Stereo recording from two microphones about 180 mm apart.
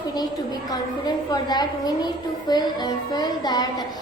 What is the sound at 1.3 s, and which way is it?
A woman's voice, 20° left (ahead or behind).